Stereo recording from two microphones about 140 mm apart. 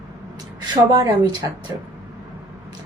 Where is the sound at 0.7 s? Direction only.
30° right (ahead or behind).